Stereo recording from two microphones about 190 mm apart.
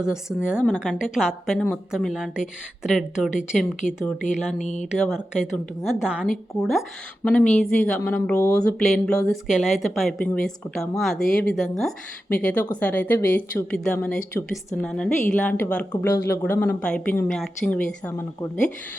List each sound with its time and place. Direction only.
0.0 s speech: 5° right (ahead or behind)
4.5 s speech: 40° left (ahead or behind)
4.9 s speech: centre (ahead or behind)